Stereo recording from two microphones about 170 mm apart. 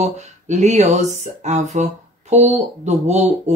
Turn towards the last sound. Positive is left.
turn(degrees=-40)  # may be behind; listen again after turning